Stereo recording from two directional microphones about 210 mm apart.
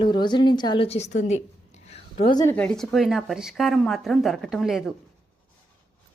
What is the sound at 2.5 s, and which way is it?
Speech, 5° left (ahead or behind).